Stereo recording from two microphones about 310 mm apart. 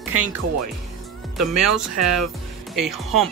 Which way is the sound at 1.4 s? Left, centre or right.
Right.